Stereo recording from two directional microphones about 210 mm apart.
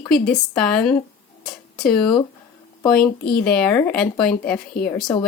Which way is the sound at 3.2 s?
45° left (ahead or behind).